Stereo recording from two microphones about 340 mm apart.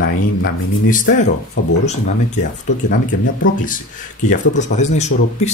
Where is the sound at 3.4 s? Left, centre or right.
Left.